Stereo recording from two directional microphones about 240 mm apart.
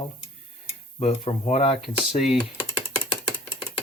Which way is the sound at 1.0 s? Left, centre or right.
Left.